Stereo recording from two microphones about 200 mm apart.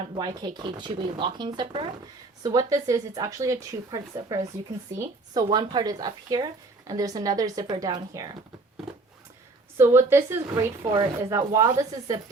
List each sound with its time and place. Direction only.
0.2 s speech: 20° right (ahead or behind)
9.7 s speech: 10° right (ahead or behind)